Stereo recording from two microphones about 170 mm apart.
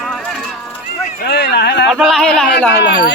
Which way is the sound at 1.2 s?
75° left (ahead or behind).